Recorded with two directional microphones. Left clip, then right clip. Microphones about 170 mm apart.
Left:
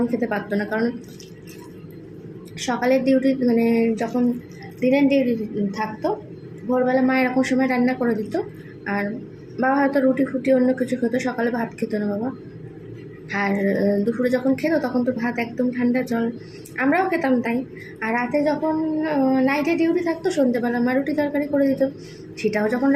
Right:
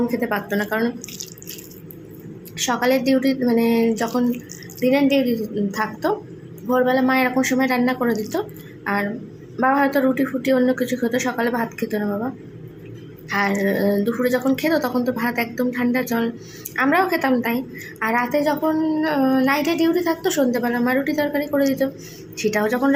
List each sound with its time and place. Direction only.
0.1 s speech: centre (ahead or behind)
2.6 s a woman's voice: centre (ahead or behind)
13.3 s speech: centre (ahead or behind)